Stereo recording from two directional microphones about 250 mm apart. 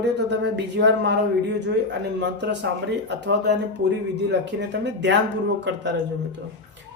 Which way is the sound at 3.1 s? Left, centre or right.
Right.